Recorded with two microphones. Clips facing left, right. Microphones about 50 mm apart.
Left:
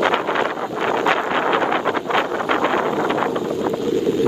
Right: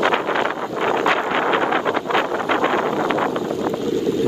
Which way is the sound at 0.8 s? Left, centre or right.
Right.